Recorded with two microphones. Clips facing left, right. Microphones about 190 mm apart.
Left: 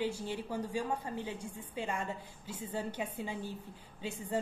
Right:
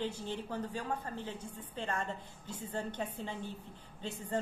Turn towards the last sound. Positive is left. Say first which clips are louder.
# left 1 dB
turn(degrees=10)  # may be behind; listen again after turning